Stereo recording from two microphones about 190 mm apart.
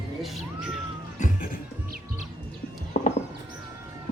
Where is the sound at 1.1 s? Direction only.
45° left (ahead or behind).